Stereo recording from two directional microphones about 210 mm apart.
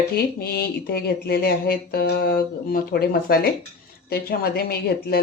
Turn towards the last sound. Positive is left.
turn(degrees=50)  # may be behind; listen again after turning